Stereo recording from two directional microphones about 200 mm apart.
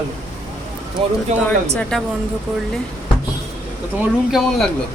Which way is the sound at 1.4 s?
5° left (ahead or behind).